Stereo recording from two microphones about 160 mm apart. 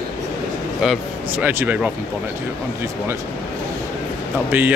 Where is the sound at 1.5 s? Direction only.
10° right (ahead or behind).